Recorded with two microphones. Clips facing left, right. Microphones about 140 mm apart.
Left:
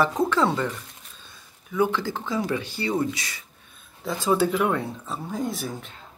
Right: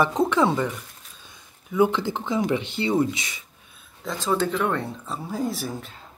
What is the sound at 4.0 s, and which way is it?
Speech, 5° left (ahead or behind).